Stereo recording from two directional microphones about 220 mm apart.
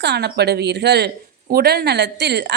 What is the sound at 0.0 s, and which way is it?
A woman's voice, 50° right (ahead or behind).